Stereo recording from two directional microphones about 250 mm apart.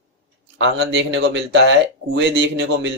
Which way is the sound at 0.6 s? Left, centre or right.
Right.